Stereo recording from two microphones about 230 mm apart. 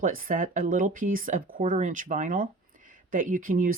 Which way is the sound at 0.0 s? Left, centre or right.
Right.